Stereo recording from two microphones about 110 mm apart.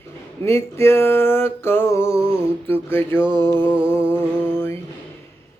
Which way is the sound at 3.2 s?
40° right (ahead or behind).